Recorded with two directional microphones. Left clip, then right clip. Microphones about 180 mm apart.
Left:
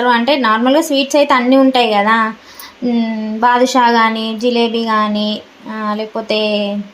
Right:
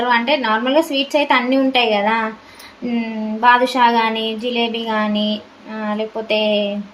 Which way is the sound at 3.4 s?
30° left (ahead or behind).